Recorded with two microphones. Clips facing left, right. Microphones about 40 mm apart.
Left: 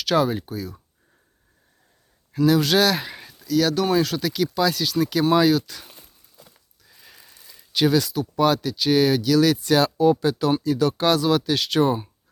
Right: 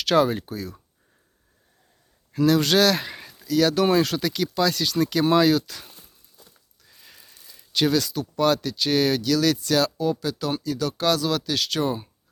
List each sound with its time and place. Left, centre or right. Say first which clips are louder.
0.0 s speech: right 1 dB; centre
2.3 s speech: left 1 dB; centre